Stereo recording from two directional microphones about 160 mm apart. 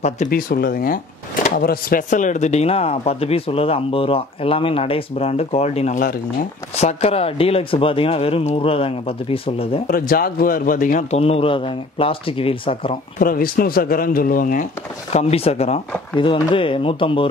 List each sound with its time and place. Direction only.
0.3 s speech: 70° left (ahead or behind); by 9.8 s 35° left (ahead or behind)
9.8 s a man's voice: 65° left (ahead or behind); by 12.9 s 35° left (ahead or behind)
13.2 s speech: 65° left (ahead or behind)
15.1 s speech: 40° left (ahead or behind)